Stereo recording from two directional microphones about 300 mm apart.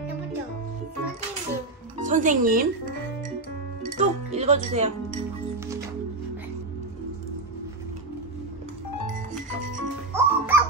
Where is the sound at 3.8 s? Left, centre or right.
Right.